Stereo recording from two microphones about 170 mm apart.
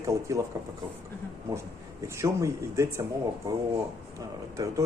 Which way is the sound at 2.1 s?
15° right (ahead or behind).